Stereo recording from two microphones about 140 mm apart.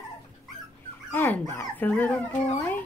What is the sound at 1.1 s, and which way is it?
Speech, 15° left (ahead or behind).